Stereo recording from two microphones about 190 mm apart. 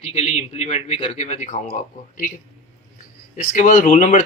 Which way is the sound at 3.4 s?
40° left (ahead or behind).